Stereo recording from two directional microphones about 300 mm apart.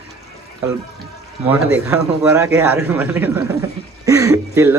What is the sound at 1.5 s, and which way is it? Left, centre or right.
A man's voice, centre.